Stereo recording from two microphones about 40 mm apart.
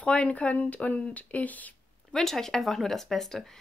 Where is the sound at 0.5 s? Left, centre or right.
Left.